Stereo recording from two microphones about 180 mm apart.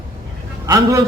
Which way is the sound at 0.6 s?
20° right (ahead or behind).